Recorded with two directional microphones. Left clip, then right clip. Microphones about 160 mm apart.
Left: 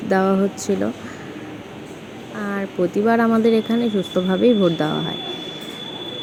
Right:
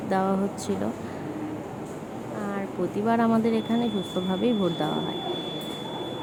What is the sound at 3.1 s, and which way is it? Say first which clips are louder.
Speech: left 6 dB; 25° left (ahead or behind).